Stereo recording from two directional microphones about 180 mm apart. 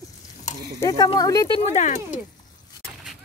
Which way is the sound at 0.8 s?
20° left (ahead or behind).